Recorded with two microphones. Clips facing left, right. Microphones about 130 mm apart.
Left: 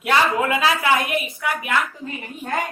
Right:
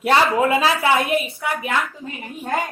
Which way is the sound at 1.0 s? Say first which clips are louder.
Right 2 dB; 30° right (ahead or behind).